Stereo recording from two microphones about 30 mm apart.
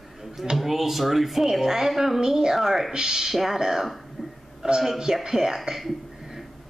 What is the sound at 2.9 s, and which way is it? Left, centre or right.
Speech, centre.